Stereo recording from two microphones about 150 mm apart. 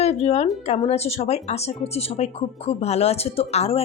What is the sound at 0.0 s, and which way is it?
Speech, 45° left (ahead or behind).